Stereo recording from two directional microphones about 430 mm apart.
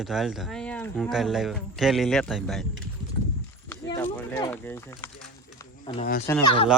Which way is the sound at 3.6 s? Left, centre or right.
Centre.